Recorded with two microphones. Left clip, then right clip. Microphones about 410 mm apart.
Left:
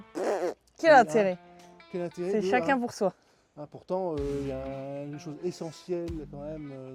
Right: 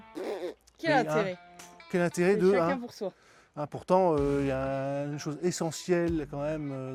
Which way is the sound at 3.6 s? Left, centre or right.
Right.